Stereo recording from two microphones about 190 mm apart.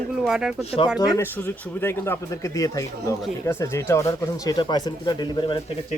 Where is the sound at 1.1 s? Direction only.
10° left (ahead or behind).